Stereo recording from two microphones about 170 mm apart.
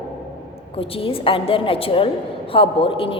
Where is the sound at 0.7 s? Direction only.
35° left (ahead or behind).